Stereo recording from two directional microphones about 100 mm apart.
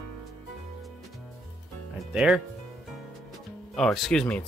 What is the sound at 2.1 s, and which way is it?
Speech, 5° right (ahead or behind).